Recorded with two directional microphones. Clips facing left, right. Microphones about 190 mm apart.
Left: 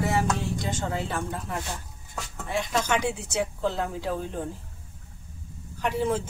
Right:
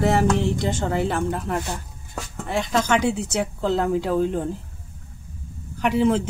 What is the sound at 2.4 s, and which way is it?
Speech, 90° right.